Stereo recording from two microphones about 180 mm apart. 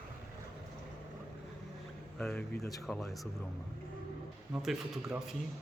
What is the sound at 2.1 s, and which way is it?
Speech, 5° left (ahead or behind).